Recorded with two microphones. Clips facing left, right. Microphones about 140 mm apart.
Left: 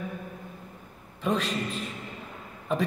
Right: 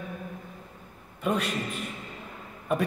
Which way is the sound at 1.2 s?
10° right (ahead or behind).